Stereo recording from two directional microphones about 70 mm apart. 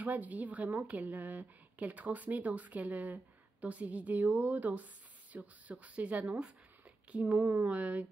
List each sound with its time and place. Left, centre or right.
0.0 s a woman's voice: right
7.3 s speech: right
7.7 s a woman's voice: centre